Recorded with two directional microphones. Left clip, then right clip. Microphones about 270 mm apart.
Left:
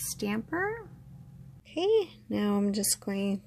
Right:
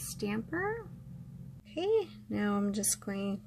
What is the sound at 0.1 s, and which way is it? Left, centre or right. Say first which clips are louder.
Speech: left 3 dB; left.